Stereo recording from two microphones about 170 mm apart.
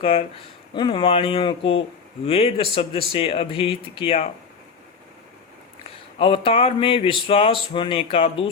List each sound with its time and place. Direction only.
0.0 s speech: 35° left (ahead or behind)
6.1 s speech: 30° left (ahead or behind)